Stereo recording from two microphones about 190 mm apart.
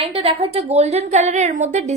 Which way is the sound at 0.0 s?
30° right (ahead or behind).